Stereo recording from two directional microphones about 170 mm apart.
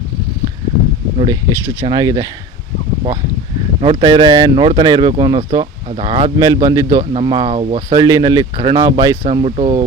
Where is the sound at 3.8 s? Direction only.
30° right (ahead or behind).